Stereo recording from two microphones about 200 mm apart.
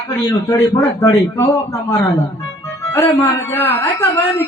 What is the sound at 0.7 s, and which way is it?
Speech, 15° left (ahead or behind).